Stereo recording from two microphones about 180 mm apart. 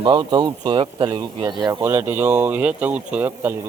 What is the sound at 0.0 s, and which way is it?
Speech, 25° right (ahead or behind).